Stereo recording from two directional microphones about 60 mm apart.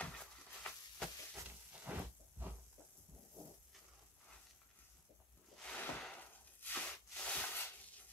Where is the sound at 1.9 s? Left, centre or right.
Right.